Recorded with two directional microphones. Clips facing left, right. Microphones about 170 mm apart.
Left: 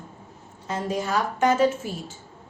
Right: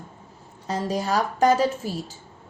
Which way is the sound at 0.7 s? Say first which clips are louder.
Right 2 dB; 35° right (ahead or behind).